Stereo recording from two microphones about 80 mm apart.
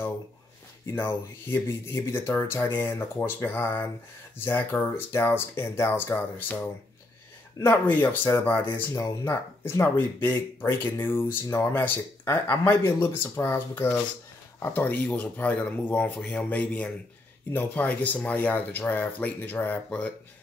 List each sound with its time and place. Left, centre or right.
0.8 s speech: left